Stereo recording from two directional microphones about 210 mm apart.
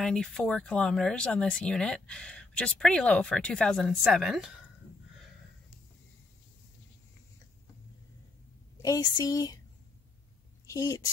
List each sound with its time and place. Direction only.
0.0 s speech: centre (ahead or behind)
8.7 s a woman's voice: 15° left (ahead or behind)
10.7 s speech: 15° left (ahead or behind)